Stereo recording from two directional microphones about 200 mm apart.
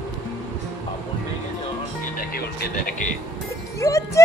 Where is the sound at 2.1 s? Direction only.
45° left (ahead or behind).